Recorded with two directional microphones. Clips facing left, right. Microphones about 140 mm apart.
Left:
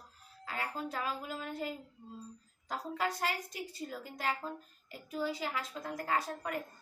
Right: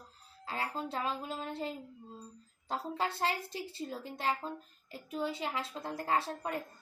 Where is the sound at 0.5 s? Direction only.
30° right (ahead or behind).